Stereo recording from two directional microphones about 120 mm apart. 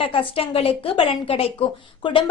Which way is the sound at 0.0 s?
45° left (ahead or behind).